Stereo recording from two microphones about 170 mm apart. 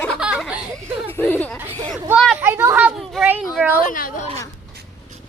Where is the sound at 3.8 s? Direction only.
55° left (ahead or behind).